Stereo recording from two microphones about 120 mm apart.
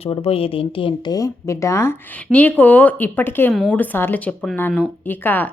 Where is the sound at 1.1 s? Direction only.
25° left (ahead or behind).